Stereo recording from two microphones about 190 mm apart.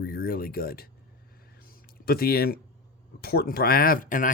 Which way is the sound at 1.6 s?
50° left (ahead or behind).